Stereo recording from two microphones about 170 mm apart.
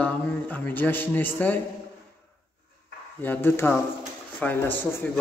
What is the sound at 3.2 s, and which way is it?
A man's voice, 10° left (ahead or behind).